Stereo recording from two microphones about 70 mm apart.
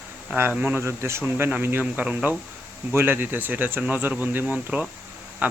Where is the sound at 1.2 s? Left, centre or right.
Right.